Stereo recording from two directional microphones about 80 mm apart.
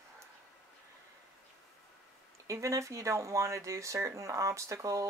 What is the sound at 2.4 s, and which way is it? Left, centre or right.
Speech, right.